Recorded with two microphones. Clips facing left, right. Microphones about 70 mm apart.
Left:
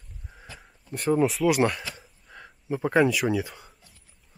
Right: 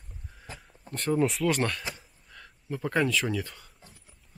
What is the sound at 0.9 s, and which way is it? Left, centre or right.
Speech, centre.